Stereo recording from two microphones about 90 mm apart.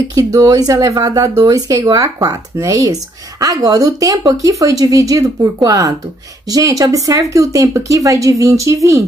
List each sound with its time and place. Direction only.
0.1 s speech: 40° right (ahead or behind)